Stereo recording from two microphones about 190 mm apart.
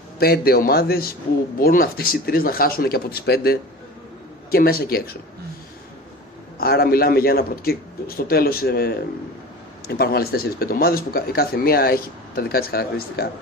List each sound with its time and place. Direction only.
0.2 s speech: 55° left (ahead or behind)
6.6 s speech: 50° left (ahead or behind)